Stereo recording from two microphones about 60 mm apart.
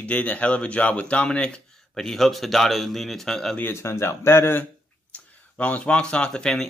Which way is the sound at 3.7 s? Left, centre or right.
Left.